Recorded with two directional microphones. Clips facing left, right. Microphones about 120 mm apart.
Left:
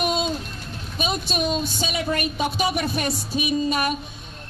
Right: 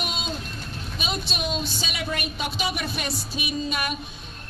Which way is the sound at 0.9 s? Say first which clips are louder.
Left 6 dB; 45° left (ahead or behind).